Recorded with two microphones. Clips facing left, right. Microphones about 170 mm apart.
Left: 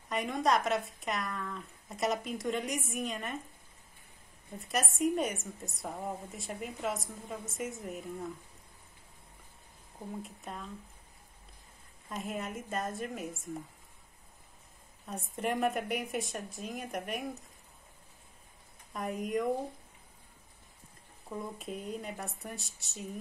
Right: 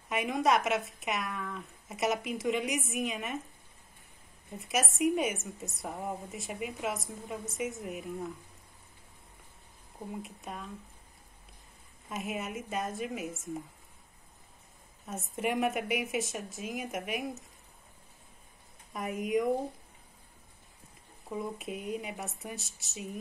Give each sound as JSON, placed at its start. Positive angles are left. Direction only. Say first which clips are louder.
{"t": 0.1, "sound": "a woman's voice", "louder": "right 2 dB", "side_deg": -5}
{"t": 4.6, "sound": "a woman's voice", "louder": "right 2 dB", "side_deg": 0}
{"t": 10.2, "sound": "a woman's voice", "louder": "right 1 dB", "side_deg": 0}
{"t": 12.1, "sound": "a woman's voice", "louder": "right 1 dB", "side_deg": 0}
{"t": 15.3, "sound": "a woman's voice", "louder": "right 1 dB", "side_deg": 0}
{"t": 18.9, "sound": "a woman's voice", "louder": "right 3 dB", "side_deg": 0}
{"t": 21.3, "sound": "a woman's voice", "louder": "right 3 dB", "side_deg": -5}